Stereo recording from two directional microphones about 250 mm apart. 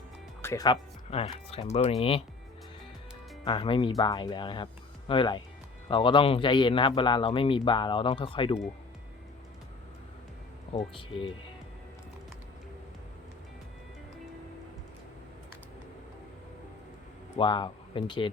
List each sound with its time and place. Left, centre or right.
0.4 s speech: centre
3.4 s speech: centre
10.9 s speech: left
17.3 s speech: centre